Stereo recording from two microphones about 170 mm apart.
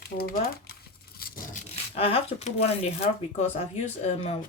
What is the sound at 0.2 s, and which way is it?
Speech, 60° left (ahead or behind).